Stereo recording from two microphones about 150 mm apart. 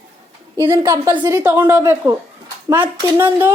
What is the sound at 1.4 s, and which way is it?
Speech, 15° right (ahead or behind).